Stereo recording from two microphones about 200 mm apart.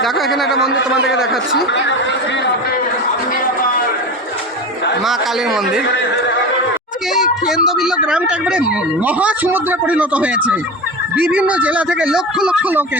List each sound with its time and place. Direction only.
0.0 s speech: centre (ahead or behind)
1.5 s speech: 65° left (ahead or behind)
5.0 s speech: centre (ahead or behind)
7.1 s a man's voice: centre (ahead or behind)